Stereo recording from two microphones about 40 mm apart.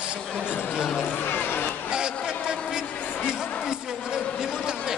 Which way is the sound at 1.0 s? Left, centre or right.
Left.